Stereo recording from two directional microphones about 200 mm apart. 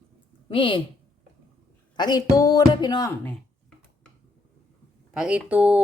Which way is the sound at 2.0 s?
20° left (ahead or behind).